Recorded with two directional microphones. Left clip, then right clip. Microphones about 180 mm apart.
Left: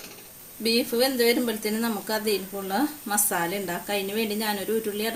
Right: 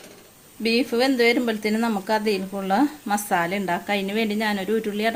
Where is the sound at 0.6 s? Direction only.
45° right (ahead or behind).